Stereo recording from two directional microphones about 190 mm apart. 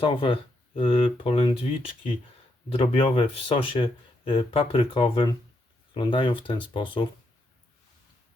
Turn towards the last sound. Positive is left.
turn(degrees=25)  # may be behind; listen again after turning